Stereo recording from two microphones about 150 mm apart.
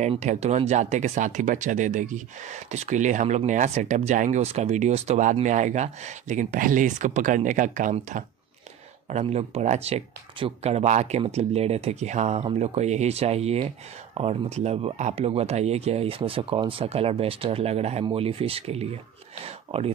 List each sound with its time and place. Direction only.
0.0 s speech: 50° right (ahead or behind)
9.1 s speech: 45° right (ahead or behind)